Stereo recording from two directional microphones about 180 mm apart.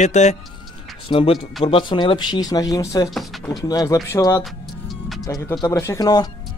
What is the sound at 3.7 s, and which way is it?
Speech, 20° left (ahead or behind).